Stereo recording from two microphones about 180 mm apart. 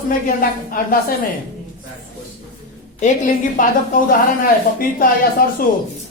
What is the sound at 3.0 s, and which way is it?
A man's voice, 45° left (ahead or behind).